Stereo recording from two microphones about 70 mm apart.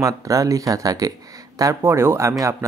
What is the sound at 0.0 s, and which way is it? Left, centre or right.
Speech, right.